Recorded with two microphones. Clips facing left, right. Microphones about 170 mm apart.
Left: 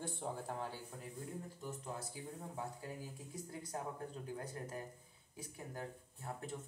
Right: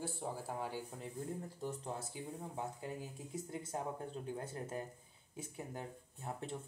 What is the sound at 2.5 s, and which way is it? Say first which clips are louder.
Speech: right 3 dB; 25° right (ahead or behind).